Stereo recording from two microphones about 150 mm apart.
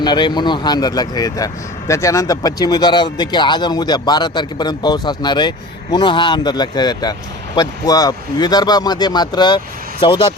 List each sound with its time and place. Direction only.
0.0 s speech: 30° left (ahead or behind)